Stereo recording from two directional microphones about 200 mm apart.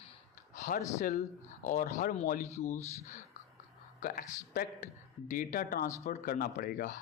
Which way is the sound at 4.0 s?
45° left (ahead or behind).